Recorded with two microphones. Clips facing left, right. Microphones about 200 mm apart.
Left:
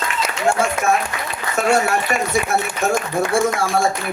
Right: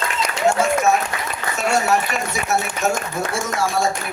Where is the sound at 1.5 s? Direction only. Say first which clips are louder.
Left 2 dB; 55° left (ahead or behind).